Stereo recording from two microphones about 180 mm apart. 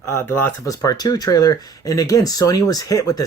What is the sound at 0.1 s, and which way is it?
Speech, 15° left (ahead or behind).